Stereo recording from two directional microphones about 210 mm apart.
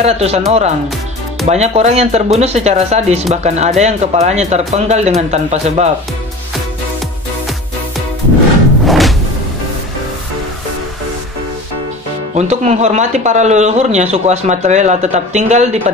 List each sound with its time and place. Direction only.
0.0 s speech: 30° right (ahead or behind)
8.8 s music: centre (ahead or behind)
12.4 s speech: 30° right (ahead or behind)